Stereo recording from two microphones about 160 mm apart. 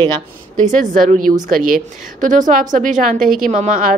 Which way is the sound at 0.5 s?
50° right (ahead or behind).